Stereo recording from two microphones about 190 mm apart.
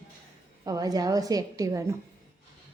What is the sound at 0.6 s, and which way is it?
A woman's voice, 20° right (ahead or behind).